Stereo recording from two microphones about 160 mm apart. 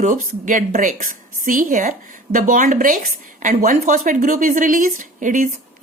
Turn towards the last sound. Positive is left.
turn(degrees=-55)  # may be behind; listen again after turning